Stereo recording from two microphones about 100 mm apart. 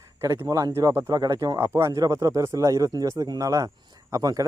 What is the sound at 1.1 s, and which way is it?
Speech, 40° right (ahead or behind).